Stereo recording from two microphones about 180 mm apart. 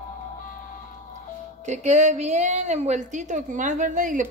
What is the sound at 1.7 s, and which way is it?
A woman's voice, 40° right (ahead or behind).